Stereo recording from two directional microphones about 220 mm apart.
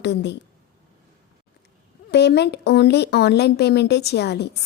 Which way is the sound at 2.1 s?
50° left (ahead or behind).